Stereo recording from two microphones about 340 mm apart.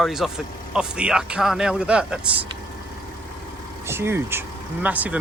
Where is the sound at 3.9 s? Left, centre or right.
Centre.